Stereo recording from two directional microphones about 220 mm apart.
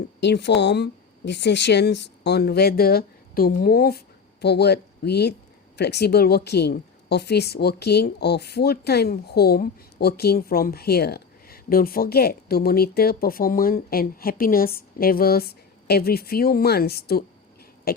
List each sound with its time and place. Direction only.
0.2 s speech: 50° left (ahead or behind)
17.9 s owl: 45° left (ahead or behind)